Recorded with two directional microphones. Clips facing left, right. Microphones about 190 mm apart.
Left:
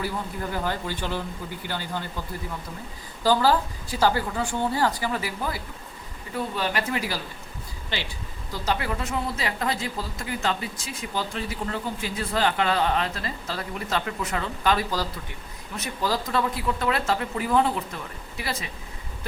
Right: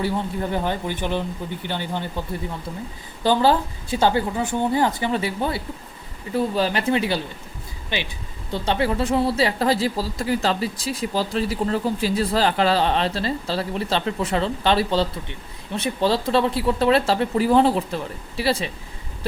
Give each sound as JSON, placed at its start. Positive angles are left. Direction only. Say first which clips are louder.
{"t": 0.5, "sound": "speech", "louder": "right 2 dB", "side_deg": -20}
{"t": 3.2, "sound": "speech", "louder": "right 3 dB", "side_deg": -25}
{"t": 8.5, "sound": "speech", "louder": "right 6 dB", "side_deg": -30}